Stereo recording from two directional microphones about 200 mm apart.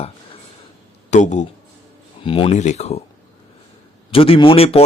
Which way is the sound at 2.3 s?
25° left (ahead or behind).